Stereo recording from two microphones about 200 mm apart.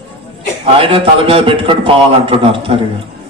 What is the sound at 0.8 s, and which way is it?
A man's voice, 30° right (ahead or behind).